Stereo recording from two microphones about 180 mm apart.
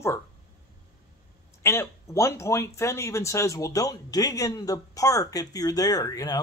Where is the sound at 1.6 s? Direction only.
15° left (ahead or behind).